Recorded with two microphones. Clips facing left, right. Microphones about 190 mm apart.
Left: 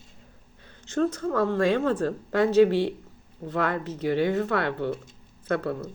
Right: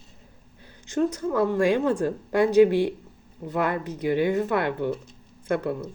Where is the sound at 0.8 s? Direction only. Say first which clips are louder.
Right 1 dB; 15° right (ahead or behind).